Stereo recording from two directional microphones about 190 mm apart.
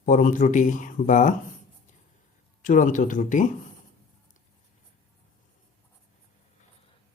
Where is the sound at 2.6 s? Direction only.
45° left (ahead or behind).